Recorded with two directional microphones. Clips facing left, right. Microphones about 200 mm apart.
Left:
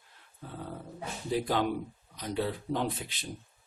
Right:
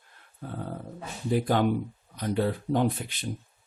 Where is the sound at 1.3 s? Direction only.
55° right (ahead or behind).